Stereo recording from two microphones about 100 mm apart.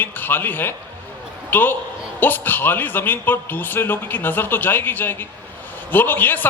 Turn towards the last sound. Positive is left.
turn(degrees=20)  # may be behind; listen again after turning